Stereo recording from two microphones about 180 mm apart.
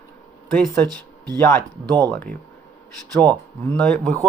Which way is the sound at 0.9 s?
20° right (ahead or behind).